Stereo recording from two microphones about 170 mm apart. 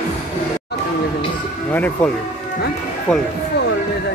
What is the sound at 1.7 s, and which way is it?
Speech, 10° left (ahead or behind).